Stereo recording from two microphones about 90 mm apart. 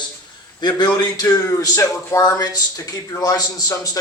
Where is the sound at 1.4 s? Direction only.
35° left (ahead or behind).